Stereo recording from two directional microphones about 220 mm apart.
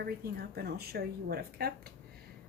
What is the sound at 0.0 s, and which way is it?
Speech, 45° right (ahead or behind).